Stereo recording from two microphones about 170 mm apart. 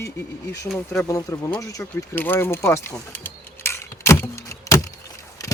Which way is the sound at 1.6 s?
20° left (ahead or behind).